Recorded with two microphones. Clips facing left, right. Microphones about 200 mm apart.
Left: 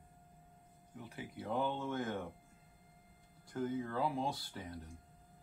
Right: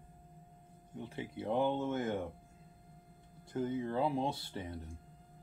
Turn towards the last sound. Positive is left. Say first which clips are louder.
# right 4 dB
turn(degrees=-25)  # may be behind; listen again after turning